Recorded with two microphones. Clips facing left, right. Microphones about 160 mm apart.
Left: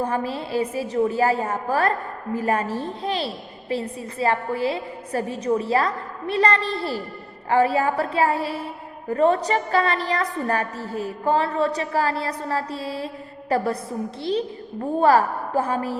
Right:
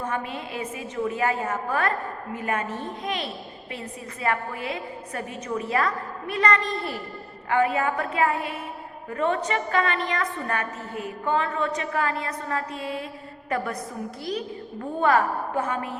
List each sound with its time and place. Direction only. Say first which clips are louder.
0.0 s a woman's voice: left 5 dB; 35° left (ahead or behind)